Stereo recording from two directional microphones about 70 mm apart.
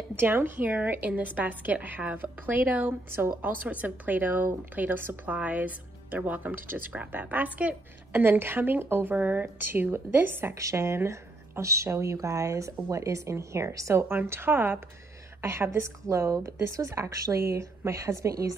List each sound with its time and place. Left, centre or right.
0.1 s speech: right
8.1 s a woman's voice: right
10.5 s a woman's voice: right